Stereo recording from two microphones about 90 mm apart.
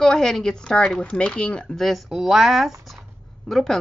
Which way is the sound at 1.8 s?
Centre (ahead or behind).